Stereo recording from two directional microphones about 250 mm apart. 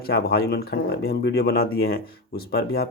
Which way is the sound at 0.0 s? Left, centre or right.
Left.